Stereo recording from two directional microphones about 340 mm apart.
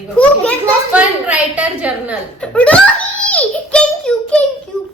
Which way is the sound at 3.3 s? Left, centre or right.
Centre.